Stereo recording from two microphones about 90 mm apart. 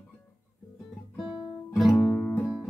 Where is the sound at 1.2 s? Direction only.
Centre (ahead or behind).